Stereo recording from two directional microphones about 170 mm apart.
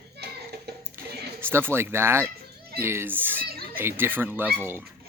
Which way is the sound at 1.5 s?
15° right (ahead or behind).